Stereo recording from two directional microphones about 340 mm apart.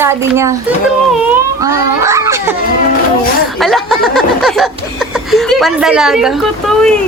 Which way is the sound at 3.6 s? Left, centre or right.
Centre.